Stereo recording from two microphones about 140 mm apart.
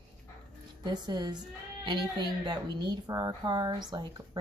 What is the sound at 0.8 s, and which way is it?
A woman's voice, 30° right (ahead or behind).